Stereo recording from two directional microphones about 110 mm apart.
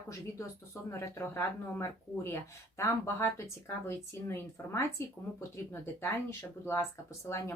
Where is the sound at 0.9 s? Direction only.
20° left (ahead or behind).